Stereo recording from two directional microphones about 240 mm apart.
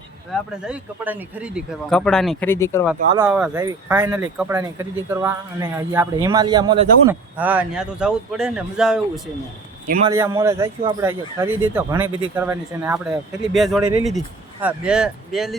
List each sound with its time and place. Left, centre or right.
0.7 s speech: centre
3.2 s speech: centre
7.3 s speech: centre
9.8 s speech: right
10.1 s speech: centre